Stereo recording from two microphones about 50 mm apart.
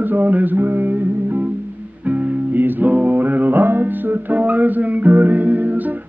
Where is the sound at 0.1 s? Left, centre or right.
Right.